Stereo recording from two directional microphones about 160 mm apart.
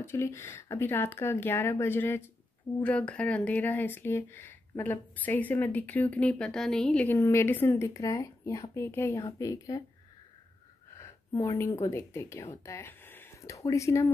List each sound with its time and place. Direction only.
0.0 s speech: 15° left (ahead or behind)
11.0 s speech: 20° left (ahead or behind)